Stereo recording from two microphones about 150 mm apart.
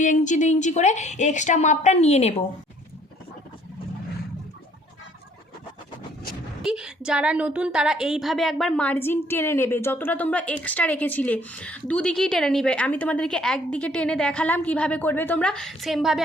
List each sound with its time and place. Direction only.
0.0 s a woman's voice: 55° left (ahead or behind)
6.6 s a woman's voice: 5° right (ahead or behind)